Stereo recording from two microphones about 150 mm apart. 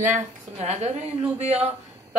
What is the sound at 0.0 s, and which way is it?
A woman's voice, 55° right (ahead or behind).